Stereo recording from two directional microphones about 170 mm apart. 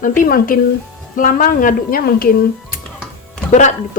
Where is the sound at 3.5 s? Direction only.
45° left (ahead or behind).